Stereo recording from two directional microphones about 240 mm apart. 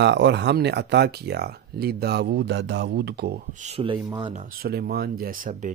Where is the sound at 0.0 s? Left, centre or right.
Right.